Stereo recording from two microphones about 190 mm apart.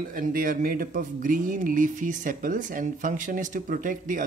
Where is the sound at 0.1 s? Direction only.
45° right (ahead or behind).